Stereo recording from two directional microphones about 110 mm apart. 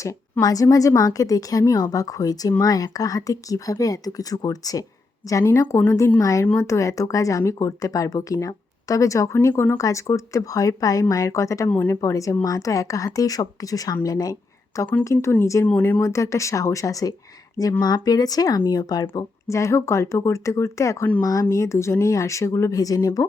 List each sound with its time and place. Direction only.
0.0 s a woman's voice: 30° left (ahead or behind)
6.1 s a woman's voice: 30° left (ahead or behind)
11.7 s speech: 15° left (ahead or behind)
11.9 s a woman's voice: 30° left (ahead or behind)
16.0 s a woman's voice: 25° left (ahead or behind)